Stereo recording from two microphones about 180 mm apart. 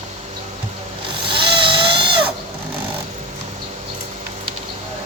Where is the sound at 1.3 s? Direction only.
30° right (ahead or behind).